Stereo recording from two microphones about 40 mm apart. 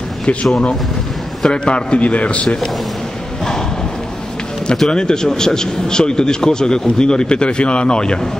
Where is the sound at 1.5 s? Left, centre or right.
Left.